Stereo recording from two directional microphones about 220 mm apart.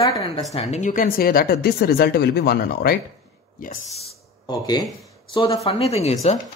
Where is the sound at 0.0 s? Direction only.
25° left (ahead or behind); by 3.7 s 40° left (ahead or behind).